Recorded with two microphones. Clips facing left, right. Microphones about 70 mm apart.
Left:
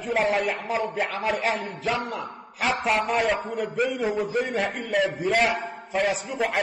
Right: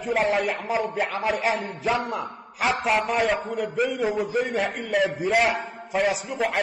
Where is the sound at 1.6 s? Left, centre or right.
Centre.